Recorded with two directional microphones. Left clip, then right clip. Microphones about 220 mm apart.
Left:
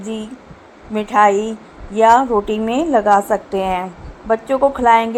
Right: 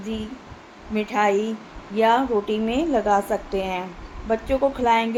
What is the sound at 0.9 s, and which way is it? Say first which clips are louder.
A woman's voice: left 8 dB; 25° left (ahead or behind).